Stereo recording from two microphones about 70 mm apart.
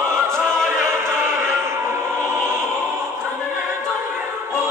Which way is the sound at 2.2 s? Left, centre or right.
Right.